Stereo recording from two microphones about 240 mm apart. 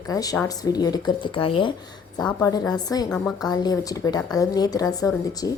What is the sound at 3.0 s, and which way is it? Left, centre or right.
Speech, centre.